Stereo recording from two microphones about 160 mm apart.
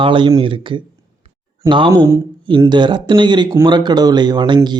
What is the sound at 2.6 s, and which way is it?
Speech, 30° right (ahead or behind).